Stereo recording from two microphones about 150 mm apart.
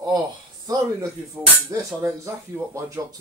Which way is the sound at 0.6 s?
25° right (ahead or behind).